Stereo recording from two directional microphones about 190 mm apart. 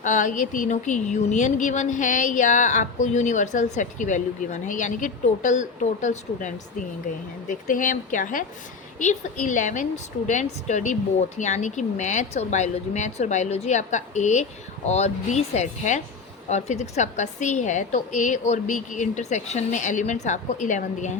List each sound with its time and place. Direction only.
0.0 s speech: 40° left (ahead or behind)